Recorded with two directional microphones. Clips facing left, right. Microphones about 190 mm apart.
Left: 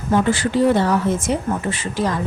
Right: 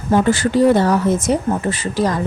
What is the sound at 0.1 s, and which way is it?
Speech, 40° right (ahead or behind).